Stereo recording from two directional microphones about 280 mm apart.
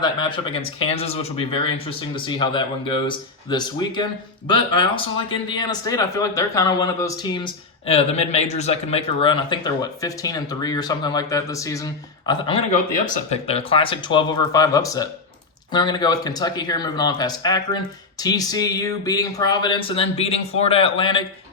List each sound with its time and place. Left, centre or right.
0.0 s a man's voice: centre